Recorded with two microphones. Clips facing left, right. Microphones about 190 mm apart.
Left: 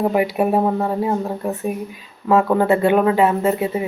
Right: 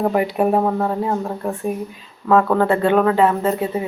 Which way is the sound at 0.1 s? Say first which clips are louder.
Even; 10° left (ahead or behind).